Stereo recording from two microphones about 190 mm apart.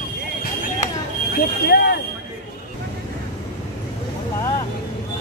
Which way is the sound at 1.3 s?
55° left (ahead or behind).